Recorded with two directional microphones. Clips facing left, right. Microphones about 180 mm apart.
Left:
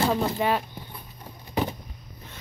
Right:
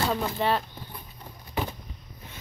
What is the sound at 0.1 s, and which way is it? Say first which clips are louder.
Speech: left 2 dB; 10° left (ahead or behind).